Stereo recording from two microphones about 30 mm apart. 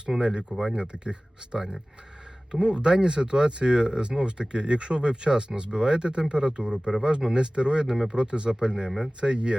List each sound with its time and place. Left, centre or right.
0.1 s speech: centre
0.7 s speech: right
2.6 s speech: right
8.4 s speech: right